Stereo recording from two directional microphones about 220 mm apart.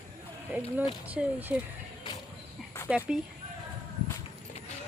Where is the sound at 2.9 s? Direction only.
5° right (ahead or behind).